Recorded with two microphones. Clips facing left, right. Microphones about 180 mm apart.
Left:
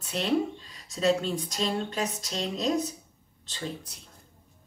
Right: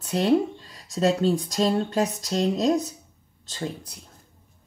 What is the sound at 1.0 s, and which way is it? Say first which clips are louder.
Speech: right 4 dB; 40° right (ahead or behind).